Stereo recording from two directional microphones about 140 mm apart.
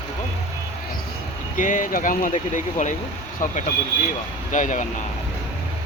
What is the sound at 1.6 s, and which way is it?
Speech, 70° left (ahead or behind).